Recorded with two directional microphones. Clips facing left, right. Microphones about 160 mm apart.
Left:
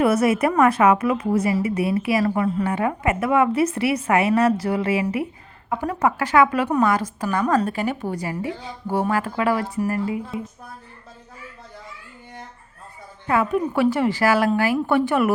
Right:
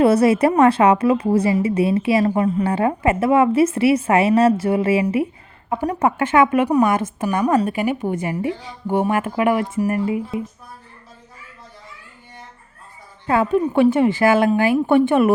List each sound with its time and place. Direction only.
0.0 s a woman's voice: 30° right (ahead or behind)
13.2 s speech: 30° right (ahead or behind)